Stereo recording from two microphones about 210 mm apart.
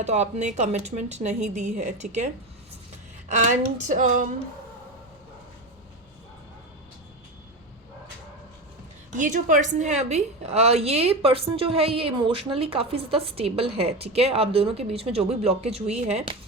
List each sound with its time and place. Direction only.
0.0 s a woman's voice: 30° right (ahead or behind)
9.1 s a woman's voice: 40° right (ahead or behind)